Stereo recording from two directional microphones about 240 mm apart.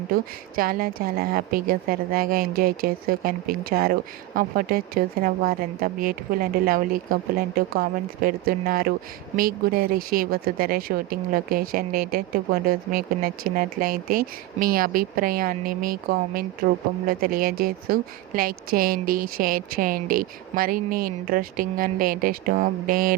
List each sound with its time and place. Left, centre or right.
0.5 s speech: right